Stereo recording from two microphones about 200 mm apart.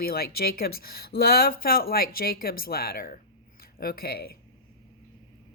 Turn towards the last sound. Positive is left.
turn(degrees=50)  # may be behind; listen again after turning